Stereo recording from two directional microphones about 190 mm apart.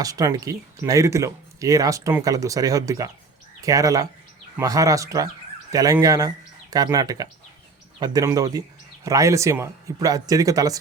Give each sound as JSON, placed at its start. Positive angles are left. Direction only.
{"t": 0.0, "sound": "speech", "side_deg": -20}